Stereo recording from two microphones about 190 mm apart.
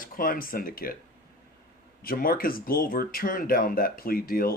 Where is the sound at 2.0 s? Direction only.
50° left (ahead or behind).